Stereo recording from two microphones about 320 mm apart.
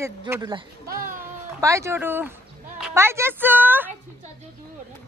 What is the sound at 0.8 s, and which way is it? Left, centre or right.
Speech, right.